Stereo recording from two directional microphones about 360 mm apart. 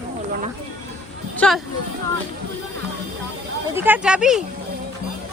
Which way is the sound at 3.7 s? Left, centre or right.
Centre.